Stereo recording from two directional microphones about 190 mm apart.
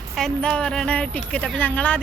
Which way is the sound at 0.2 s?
5° left (ahead or behind).